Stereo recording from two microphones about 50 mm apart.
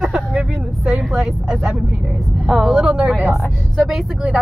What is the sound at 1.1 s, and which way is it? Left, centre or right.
A woman's voice, centre.